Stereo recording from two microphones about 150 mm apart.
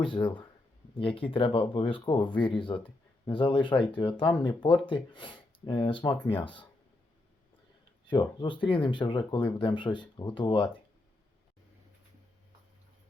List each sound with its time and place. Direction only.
0.0 s speech: 30° left (ahead or behind)
6.1 s speech: 15° left (ahead or behind)
8.0 s speech: 30° left (ahead or behind)